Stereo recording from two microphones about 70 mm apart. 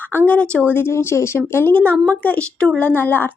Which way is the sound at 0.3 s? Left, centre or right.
Centre.